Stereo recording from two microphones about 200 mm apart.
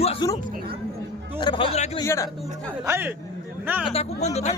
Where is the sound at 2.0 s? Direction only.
15° left (ahead or behind).